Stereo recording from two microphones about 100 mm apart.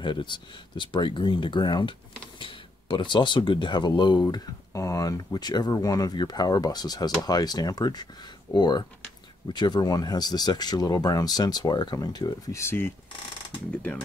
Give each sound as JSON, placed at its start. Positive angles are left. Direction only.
{"t": 0.0, "sound": "speech", "side_deg": 55}
{"t": 2.3, "sound": "speech", "side_deg": 60}
{"t": 4.7, "sound": "speech", "side_deg": 35}
{"t": 12.5, "sound": "speech", "side_deg": 25}